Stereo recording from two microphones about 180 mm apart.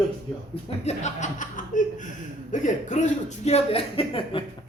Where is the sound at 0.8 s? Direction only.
40° left (ahead or behind).